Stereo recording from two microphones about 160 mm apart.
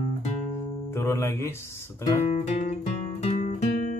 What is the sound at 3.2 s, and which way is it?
Music, 45° left (ahead or behind).